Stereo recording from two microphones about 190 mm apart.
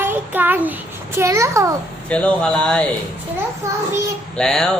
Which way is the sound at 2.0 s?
5° left (ahead or behind).